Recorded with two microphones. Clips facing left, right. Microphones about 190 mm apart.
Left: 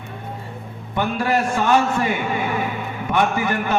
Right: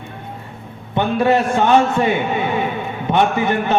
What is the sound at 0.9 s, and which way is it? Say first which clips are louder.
A man's voice: right 5 dB; 25° right (ahead or behind).